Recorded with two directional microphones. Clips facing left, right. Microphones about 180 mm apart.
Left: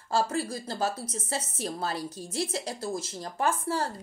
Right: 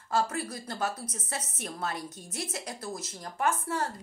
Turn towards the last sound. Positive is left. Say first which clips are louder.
# left 2 dB
turn(degrees=30)  # may be behind; listen again after turning